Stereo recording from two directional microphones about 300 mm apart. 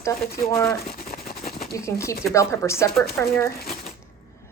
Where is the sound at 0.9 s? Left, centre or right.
Left.